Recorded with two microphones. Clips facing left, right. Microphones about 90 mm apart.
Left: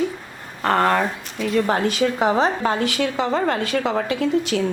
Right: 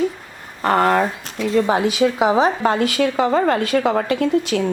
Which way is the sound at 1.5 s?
20° right (ahead or behind).